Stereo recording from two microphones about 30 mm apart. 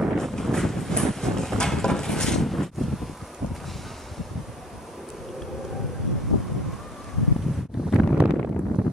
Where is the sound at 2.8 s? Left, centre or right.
Centre.